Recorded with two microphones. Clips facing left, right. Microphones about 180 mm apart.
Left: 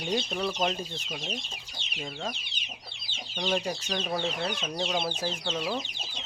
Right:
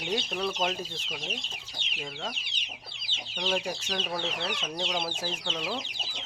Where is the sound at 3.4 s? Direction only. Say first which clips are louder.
Left 1 dB; centre (ahead or behind).